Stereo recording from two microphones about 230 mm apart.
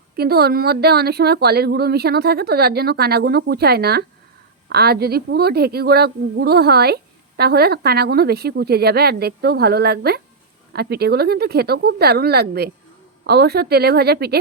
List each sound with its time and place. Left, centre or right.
0.2 s a woman's voice: right